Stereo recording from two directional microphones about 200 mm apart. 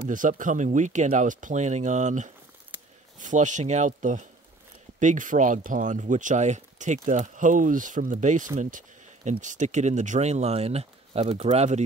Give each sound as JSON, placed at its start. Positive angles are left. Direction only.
{"t": 0.0, "sound": "speech", "side_deg": -40}
{"t": 2.7, "sound": "a sound", "side_deg": -10}
{"t": 3.2, "sound": "speech", "side_deg": -40}